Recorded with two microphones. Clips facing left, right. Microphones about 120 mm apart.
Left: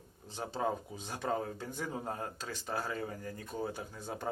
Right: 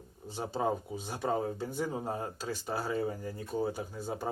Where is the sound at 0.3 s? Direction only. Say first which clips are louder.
Right 3 dB; 10° right (ahead or behind).